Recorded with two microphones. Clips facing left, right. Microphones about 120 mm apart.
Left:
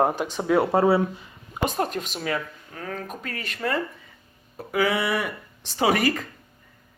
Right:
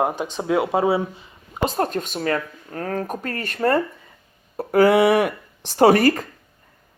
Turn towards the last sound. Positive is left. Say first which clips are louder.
# right 7 dB
turn(degrees=-35)  # may be behind; listen again after turning